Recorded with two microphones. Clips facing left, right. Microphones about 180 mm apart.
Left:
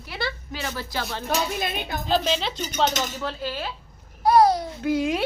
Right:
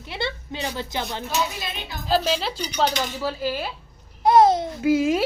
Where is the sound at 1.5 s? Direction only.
55° left (ahead or behind).